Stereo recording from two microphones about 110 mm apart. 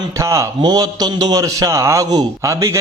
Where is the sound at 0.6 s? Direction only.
35° right (ahead or behind).